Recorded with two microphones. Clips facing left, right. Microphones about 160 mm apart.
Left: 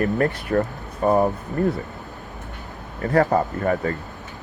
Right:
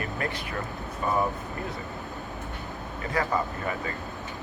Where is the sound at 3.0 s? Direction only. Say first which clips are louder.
Left 9 dB; 55° left (ahead or behind).